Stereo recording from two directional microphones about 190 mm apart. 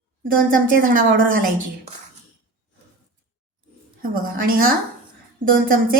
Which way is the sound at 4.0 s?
50° right (ahead or behind).